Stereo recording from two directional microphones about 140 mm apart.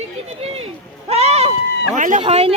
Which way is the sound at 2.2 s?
45° right (ahead or behind).